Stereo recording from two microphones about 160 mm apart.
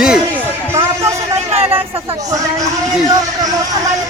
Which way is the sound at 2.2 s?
20° right (ahead or behind).